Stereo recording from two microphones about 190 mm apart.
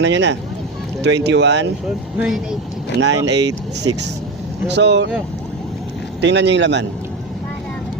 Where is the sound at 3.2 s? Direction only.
65° right (ahead or behind).